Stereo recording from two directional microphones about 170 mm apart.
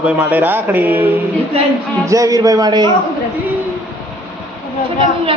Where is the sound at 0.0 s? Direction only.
10° right (ahead or behind).